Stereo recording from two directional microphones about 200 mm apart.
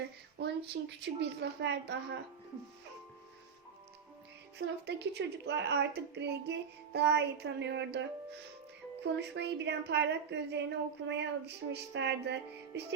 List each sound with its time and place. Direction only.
0.3 s a woman's voice: 60° right (ahead or behind)
4.5 s a woman's voice: 60° right (ahead or behind)